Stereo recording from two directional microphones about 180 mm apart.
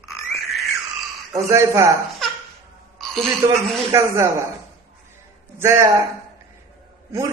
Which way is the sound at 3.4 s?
20° right (ahead or behind).